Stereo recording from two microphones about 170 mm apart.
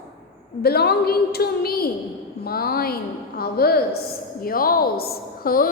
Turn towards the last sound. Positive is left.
turn(degrees=60)  # may be behind; listen again after turning